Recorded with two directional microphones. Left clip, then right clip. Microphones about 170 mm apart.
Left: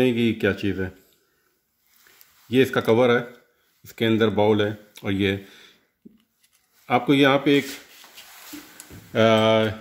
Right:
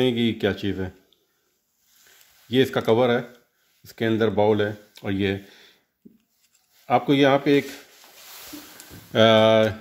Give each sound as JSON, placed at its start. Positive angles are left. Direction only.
{"t": 0.0, "sound": "speech", "side_deg": -25}
{"t": 2.5, "sound": "speech", "side_deg": -25}
{"t": 6.9, "sound": "speech", "side_deg": -25}
{"t": 9.1, "sound": "speech", "side_deg": -55}